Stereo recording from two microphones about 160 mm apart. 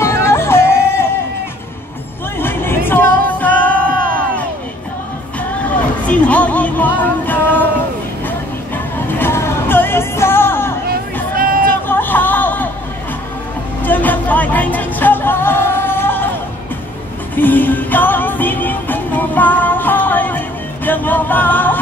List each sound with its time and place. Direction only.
0.0 s music: 15° left (ahead or behind)
2.3 s music: 15° left (ahead or behind)
6.0 s music: 10° left (ahead or behind)
11.3 s a sound: 65° right (ahead or behind)
11.9 s a sound: 10° left (ahead or behind)
13.8 s music: 10° left (ahead or behind)
17.4 s music: 10° left (ahead or behind)